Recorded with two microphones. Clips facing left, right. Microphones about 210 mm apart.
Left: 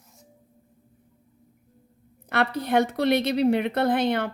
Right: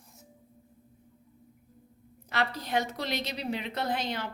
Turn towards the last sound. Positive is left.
turn(degrees=60)  # may be behind; listen again after turning